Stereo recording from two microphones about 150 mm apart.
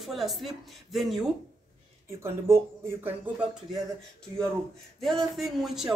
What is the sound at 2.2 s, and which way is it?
Speech, 15° right (ahead or behind).